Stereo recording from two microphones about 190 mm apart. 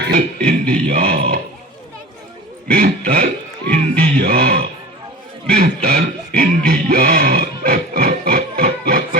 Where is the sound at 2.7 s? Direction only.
50° right (ahead or behind).